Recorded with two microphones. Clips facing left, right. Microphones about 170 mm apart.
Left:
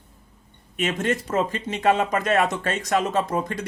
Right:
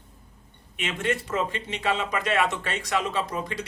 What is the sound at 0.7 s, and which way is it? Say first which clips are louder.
Speech: left 4 dB; 45° left (ahead or behind).